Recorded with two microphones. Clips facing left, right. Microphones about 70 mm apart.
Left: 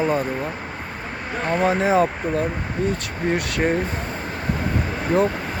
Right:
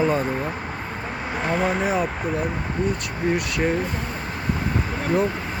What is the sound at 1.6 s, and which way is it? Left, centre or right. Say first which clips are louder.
Speech: left 6 dB; left.